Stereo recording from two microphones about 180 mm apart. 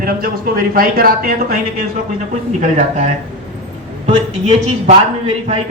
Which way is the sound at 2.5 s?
45° right (ahead or behind).